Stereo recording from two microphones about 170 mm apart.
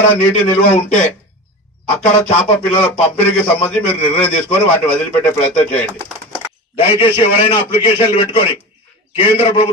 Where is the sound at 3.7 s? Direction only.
10° left (ahead or behind).